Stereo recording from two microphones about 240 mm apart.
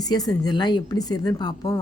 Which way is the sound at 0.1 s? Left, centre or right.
Centre.